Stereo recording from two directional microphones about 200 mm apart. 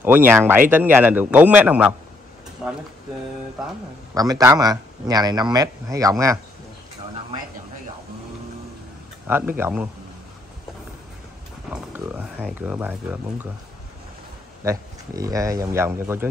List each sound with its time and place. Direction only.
0.0 s speech: 10° right (ahead or behind)
4.1 s speech: 20° right (ahead or behind)
9.3 s speech: 10° right (ahead or behind)
11.7 s speech: 5° right (ahead or behind)
14.6 s speech: 15° right (ahead or behind)